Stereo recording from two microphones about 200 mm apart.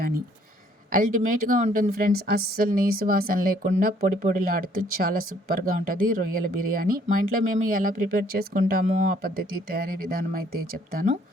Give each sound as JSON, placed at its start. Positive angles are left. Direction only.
{"t": 0.9, "sound": "a woman's voice", "side_deg": -45}
{"t": 9.2, "sound": "a woman's voice", "side_deg": -50}